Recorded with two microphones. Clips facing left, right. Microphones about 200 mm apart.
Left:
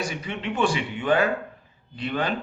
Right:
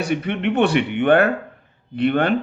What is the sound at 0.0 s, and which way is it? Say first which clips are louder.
Speech: right 9 dB; 60° right (ahead or behind).